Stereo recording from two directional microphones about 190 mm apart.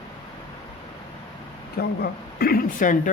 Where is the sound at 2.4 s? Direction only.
50° left (ahead or behind).